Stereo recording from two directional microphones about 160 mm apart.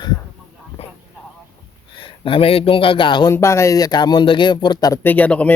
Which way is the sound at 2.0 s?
35° left (ahead or behind).